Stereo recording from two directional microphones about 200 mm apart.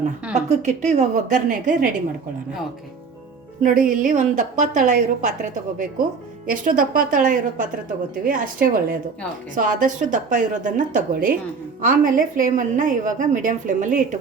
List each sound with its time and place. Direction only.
0.3 s a woman's voice: 35° right (ahead or behind)
3.6 s a woman's voice: 45° right (ahead or behind)
6.5 s a woman's voice: 45° right (ahead or behind)